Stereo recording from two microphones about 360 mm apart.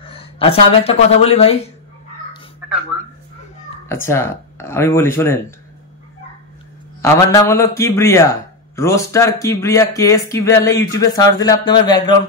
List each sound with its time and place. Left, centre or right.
0.0 s speech: centre
3.9 s a man's voice: centre
7.0 s a man's voice: centre